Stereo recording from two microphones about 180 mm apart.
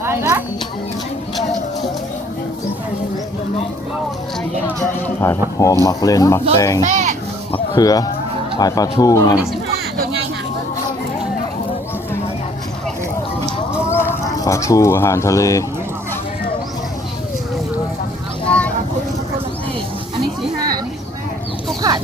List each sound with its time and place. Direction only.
0.0 s speech: 15° right (ahead or behind)
5.0 s speech: 10° left (ahead or behind)
6.8 s children playing: 45° right (ahead or behind)
7.5 s speech: 25° left (ahead or behind)
13.8 s a sound: 15° left (ahead or behind)
14.3 s speech: 20° left (ahead or behind)
21.8 s chicken: 20° right (ahead or behind)